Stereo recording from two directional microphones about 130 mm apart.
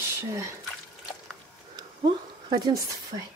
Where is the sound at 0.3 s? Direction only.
20° right (ahead or behind).